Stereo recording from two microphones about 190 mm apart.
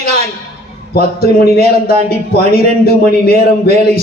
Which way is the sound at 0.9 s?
55° left (ahead or behind).